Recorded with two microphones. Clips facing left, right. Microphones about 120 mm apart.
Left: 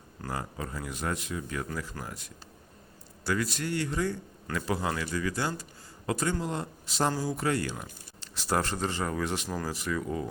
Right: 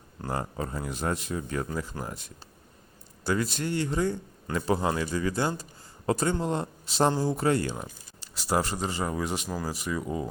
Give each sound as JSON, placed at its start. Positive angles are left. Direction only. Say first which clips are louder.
{"t": 0.2, "sound": "speech", "louder": "right 4 dB", "side_deg": -30}
{"t": 1.6, "sound": "speech", "louder": "right 3 dB", "side_deg": -25}
{"t": 3.2, "sound": "speech", "louder": "right 2 dB", "side_deg": -25}
{"t": 8.2, "sound": "speech", "louder": "right 2 dB", "side_deg": -10}